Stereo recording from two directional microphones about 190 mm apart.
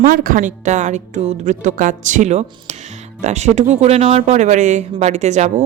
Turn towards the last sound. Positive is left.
turn(degrees=-35)  # may be behind; listen again after turning